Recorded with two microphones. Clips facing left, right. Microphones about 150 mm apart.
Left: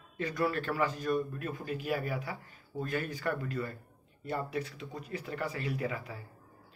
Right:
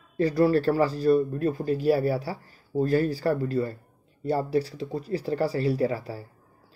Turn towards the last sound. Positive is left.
turn(degrees=-35)  # may be behind; listen again after turning